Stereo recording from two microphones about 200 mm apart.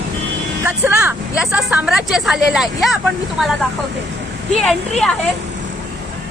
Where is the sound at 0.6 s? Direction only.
10° right (ahead or behind).